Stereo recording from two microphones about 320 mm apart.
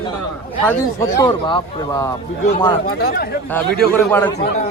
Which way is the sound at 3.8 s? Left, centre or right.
Centre.